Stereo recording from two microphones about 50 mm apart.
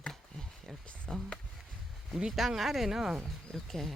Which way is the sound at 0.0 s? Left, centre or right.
Centre.